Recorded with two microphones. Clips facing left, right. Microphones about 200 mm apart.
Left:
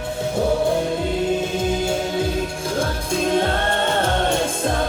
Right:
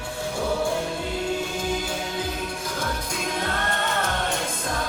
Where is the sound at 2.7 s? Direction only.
30° left (ahead or behind).